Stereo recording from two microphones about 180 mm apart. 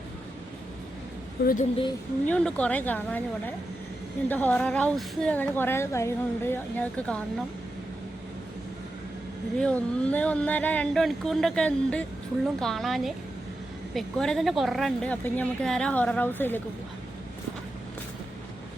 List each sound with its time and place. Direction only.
1.4 s speech: 60° left (ahead or behind)
2.2 s a woman's voice: 5° left (ahead or behind)
9.6 s a woman's voice: 5° left (ahead or behind)